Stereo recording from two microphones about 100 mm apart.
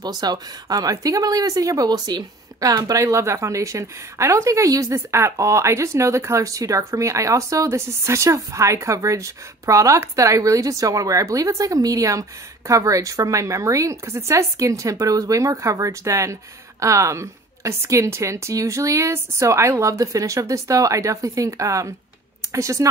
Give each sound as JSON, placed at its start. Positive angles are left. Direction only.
{"t": 0.0, "sound": "speech", "side_deg": -45}